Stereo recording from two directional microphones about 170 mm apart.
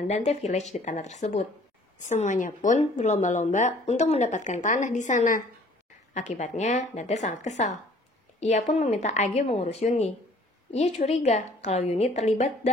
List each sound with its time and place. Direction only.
0.1 s a woman's voice: 40° left (ahead or behind)